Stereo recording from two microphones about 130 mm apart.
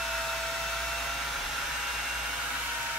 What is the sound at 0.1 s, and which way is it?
Hair dryer, centre (ahead or behind).